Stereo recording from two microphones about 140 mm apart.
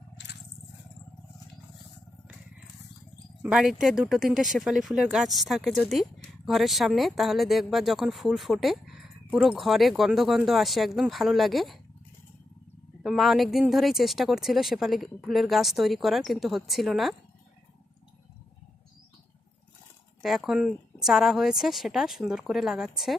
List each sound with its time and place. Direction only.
3.4 s speech: 5° right (ahead or behind)
13.0 s speech: 5° right (ahead or behind)
20.2 s speech: centre (ahead or behind)